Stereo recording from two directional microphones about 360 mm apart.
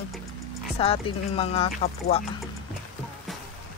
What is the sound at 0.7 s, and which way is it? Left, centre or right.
Speech, centre.